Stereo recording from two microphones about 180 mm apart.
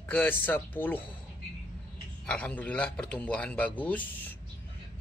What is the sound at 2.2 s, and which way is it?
A man's voice, 5° left (ahead or behind).